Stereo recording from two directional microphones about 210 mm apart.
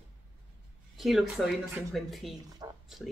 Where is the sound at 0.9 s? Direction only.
Centre (ahead or behind).